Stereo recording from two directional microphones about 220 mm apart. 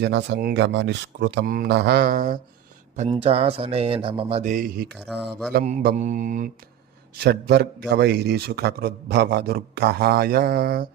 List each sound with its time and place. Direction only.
0.0 s a man's voice: 50° right (ahead or behind)
3.1 s speech: 25° right (ahead or behind)
5.6 s mantra: 35° right (ahead or behind)
7.2 s a man's voice: 45° right (ahead or behind)